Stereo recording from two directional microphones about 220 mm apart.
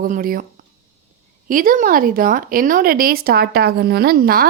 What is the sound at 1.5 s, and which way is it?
A woman's voice, 40° right (ahead or behind).